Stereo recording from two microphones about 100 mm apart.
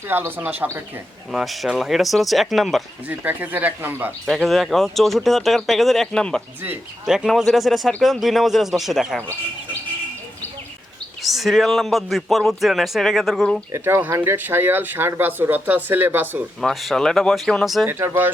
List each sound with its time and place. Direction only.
0.1 s speech: 20° right (ahead or behind)
1.3 s a man's voice: 5° right (ahead or behind)
3.1 s speech: 15° right (ahead or behind)
4.4 s a man's voice: centre (ahead or behind)
7.0 s a man's voice: 5° right (ahead or behind)
11.2 s a man's voice: centre (ahead or behind)
13.7 s speech: 25° right (ahead or behind)
16.6 s a man's voice: centre (ahead or behind)
17.8 s speech: 25° right (ahead or behind)